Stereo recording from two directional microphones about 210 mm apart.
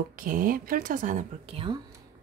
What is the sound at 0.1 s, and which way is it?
A woman's voice, 40° right (ahead or behind).